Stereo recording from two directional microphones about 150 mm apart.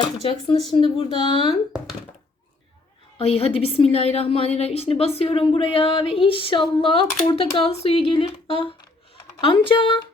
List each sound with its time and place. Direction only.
0.2 s speech: 40° left (ahead or behind)
3.2 s speech: 40° left (ahead or behind)